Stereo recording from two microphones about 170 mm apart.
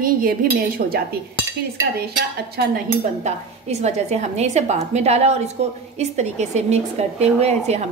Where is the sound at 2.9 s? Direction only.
45° right (ahead or behind).